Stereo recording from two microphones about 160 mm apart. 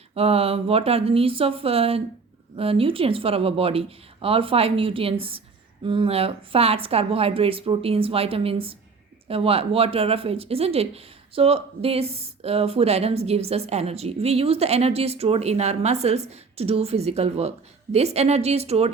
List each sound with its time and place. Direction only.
0.1 s speech: 40° right (ahead or behind)